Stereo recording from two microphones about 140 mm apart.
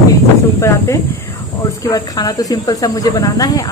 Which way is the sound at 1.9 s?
25° left (ahead or behind).